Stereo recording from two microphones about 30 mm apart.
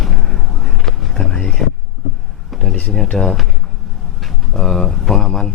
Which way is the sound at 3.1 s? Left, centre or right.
Centre.